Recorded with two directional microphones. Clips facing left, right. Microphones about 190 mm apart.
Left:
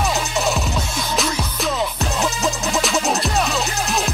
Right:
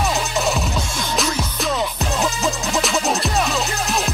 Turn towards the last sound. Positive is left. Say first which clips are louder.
# even
turn(degrees=0)  # may be behind; listen again after turning